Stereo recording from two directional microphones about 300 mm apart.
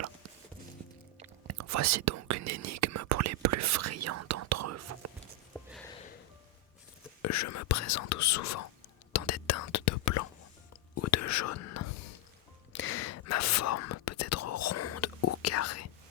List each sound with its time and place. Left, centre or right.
1.5 s speech: right
5.5 s a sound: centre
7.2 s speech: left
9.1 s whispering: left
10.9 s whispering: left
12.7 s whispering: left